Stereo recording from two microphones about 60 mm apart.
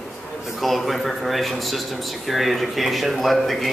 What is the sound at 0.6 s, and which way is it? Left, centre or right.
Speech, centre.